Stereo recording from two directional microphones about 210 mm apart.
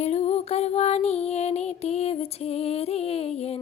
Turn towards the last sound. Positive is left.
turn(degrees=30)  # may be behind; listen again after turning